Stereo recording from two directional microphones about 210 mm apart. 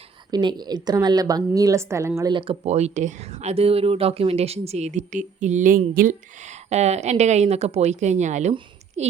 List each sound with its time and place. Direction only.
0.3 s a woman's voice: 20° right (ahead or behind)